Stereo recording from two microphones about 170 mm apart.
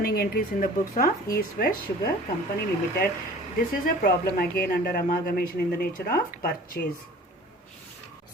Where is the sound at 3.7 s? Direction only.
55° left (ahead or behind).